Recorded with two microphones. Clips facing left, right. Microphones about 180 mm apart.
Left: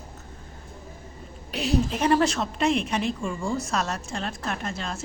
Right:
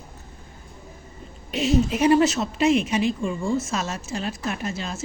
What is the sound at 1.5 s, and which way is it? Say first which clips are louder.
A woman's voice: right 4 dB; centre (ahead or behind).